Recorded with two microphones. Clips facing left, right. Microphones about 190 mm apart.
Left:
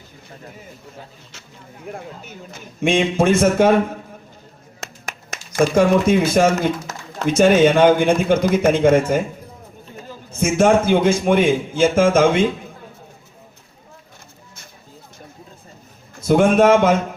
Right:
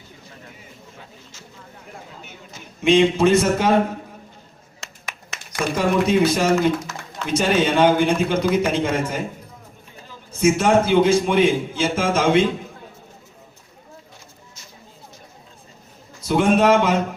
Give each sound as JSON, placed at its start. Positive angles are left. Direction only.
{"t": 1.9, "sound": "a man's voice", "side_deg": 55}
{"t": 4.8, "sound": "finger snapping", "side_deg": 45}
{"t": 5.5, "sound": "a man's voice", "side_deg": 50}
{"t": 10.4, "sound": "a man's voice", "side_deg": 50}
{"t": 16.1, "sound": "speech", "side_deg": 50}